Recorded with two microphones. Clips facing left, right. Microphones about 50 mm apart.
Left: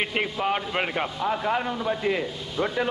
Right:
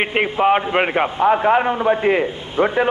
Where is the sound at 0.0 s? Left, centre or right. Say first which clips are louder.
Right 9 dB; right.